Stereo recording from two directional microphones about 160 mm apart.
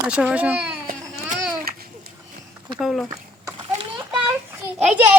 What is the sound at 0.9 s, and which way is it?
Baby cry, 50° right (ahead or behind).